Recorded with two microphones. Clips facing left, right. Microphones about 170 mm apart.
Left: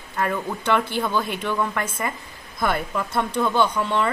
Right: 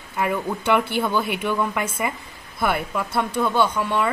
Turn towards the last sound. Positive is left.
turn(degrees=-10)  # may be behind; listen again after turning